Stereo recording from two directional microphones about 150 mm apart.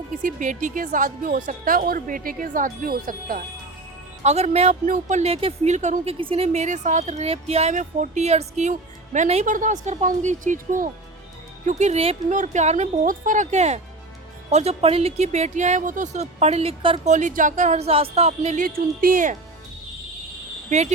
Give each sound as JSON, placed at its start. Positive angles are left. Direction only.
{"t": 0.2, "sound": "a woman's voice", "side_deg": -60}
{"t": 4.2, "sound": "speech", "side_deg": -50}
{"t": 6.1, "sound": "a woman's voice", "side_deg": -40}
{"t": 12.3, "sound": "speech", "side_deg": -55}
{"t": 17.1, "sound": "a woman's voice", "side_deg": -55}
{"t": 20.7, "sound": "speech", "side_deg": -50}